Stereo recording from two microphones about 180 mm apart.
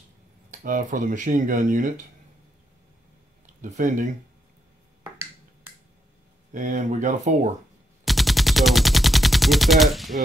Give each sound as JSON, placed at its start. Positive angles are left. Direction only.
{"t": 0.5, "sound": "speech", "side_deg": -45}
{"t": 3.6, "sound": "speech", "side_deg": -45}
{"t": 6.5, "sound": "speech", "side_deg": -45}
{"t": 8.0, "sound": "gunshot", "side_deg": 0}